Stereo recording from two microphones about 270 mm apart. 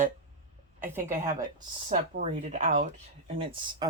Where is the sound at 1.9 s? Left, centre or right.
Right.